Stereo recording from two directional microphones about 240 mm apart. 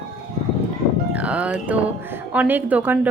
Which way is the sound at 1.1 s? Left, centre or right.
Centre.